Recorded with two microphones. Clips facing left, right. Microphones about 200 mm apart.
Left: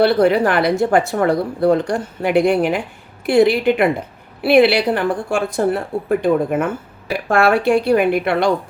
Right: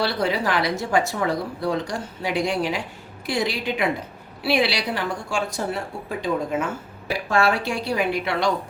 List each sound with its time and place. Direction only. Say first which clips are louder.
0.0 s speech: left 10 dB; 55° left (ahead or behind)